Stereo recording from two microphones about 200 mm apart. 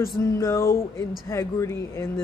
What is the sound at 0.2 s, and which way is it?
Speech, 15° left (ahead or behind).